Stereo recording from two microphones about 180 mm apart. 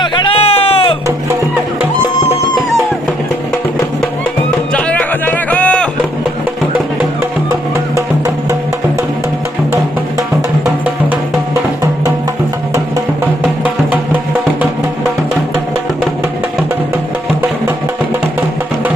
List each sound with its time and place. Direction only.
0.0 s music: 30° left (ahead or behind)
4.7 s music: 5° left (ahead or behind)